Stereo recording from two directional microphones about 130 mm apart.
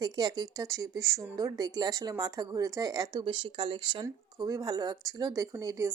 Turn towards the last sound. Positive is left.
turn(degrees=-25)  # may be behind; listen again after turning